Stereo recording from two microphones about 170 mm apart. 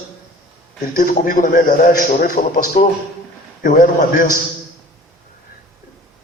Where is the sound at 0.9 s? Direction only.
55° left (ahead or behind).